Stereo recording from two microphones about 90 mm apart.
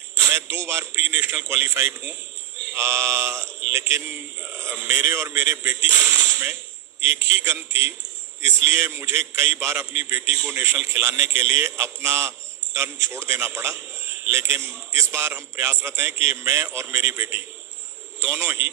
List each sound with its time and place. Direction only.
0.2 s a man's voice: 30° right (ahead or behind)
2.7 s mantra: 30° right (ahead or behind)
4.0 s a man's voice: 20° right (ahead or behind)